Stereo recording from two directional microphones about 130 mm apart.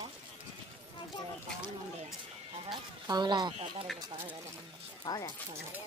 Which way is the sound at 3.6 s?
45° right (ahead or behind).